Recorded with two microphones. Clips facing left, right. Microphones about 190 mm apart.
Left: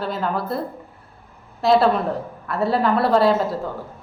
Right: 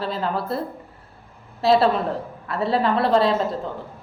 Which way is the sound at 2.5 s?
Centre (ahead or behind).